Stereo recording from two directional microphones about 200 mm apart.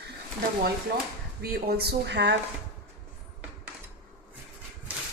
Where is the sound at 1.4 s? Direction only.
50° right (ahead or behind).